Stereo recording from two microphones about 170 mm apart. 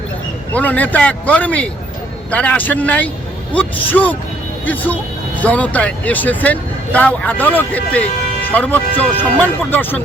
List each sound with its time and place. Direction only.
0.5 s speech: 10° left (ahead or behind)
5.4 s speech: 10° left (ahead or behind)